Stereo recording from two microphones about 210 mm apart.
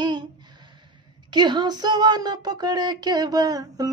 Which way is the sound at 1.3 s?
20° right (ahead or behind).